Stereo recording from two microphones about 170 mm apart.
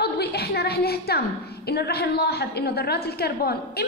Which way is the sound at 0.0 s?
70° left (ahead or behind).